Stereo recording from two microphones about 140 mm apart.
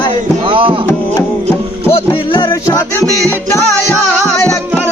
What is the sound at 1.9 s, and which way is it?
Music, 40° left (ahead or behind).